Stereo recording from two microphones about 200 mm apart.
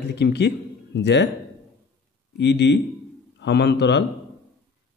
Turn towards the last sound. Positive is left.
turn(degrees=55)  # may be behind; listen again after turning